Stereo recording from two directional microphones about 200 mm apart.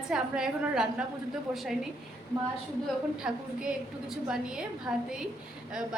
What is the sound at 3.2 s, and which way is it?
A woman's voice, 5° right (ahead or behind).